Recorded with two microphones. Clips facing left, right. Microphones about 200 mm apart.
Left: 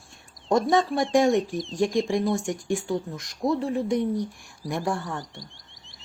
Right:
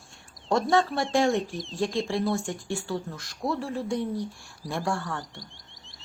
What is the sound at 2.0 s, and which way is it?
Speech, 15° left (ahead or behind).